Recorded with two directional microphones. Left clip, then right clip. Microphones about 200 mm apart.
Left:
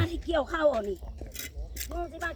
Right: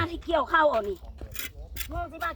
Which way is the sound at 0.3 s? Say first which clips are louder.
Right 6 dB; 20° left (ahead or behind).